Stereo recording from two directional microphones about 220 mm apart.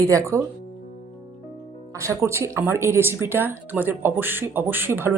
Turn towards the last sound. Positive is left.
turn(degrees=-10)  # may be behind; listen again after turning